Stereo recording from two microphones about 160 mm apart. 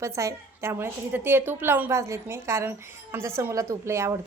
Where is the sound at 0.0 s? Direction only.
20° right (ahead or behind).